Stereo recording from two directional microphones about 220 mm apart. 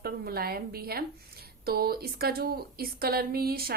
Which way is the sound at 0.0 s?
45° right (ahead or behind).